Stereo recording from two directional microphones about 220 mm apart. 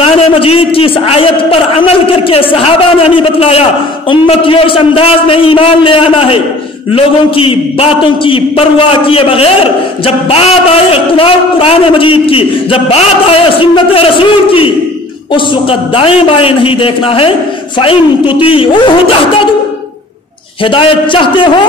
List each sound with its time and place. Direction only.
0.0 s a man's voice: 25° left (ahead or behind)
20.6 s a man's voice: 25° left (ahead or behind)